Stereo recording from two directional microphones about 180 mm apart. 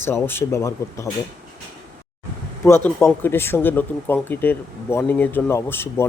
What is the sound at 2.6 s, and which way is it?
Speech, 15° left (ahead or behind).